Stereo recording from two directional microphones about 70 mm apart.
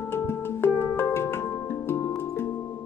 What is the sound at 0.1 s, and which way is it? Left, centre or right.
Music, left.